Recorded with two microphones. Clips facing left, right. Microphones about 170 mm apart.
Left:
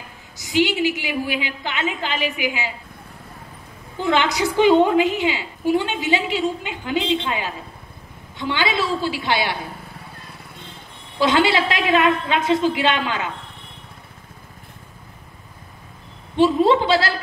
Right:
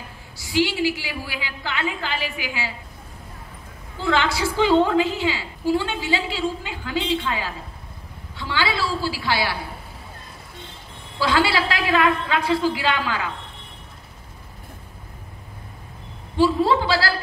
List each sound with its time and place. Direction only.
0.4 s a woman's voice: 20° left (ahead or behind)
4.0 s a woman's voice: 20° left (ahead or behind)
11.1 s a woman's voice: 20° left (ahead or behind)
16.3 s a woman's voice: 20° left (ahead or behind)